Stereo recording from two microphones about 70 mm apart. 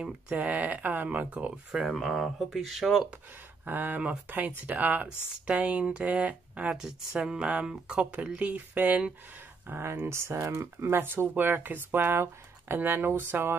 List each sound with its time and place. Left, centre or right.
0.0 s speech: centre
1.9 s speech: centre
3.6 s speech: right
6.8 s speech: centre; by 13.6 s right